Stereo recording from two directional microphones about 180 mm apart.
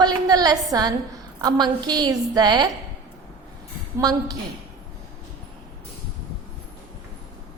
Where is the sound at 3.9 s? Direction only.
20° right (ahead or behind).